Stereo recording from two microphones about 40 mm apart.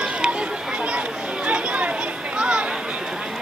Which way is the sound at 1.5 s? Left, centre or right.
Right.